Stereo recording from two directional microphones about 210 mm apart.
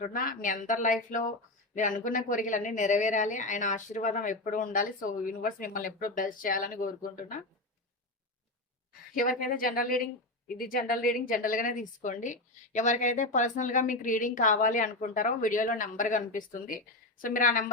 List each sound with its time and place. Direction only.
0.0 s a woman's voice: 40° left (ahead or behind)
9.4 s a woman's voice: 45° left (ahead or behind)